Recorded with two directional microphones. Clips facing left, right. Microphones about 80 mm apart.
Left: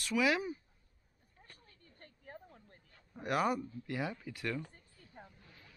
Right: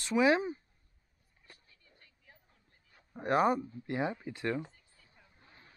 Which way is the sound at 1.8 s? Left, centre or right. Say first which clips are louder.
Left 8 dB; left.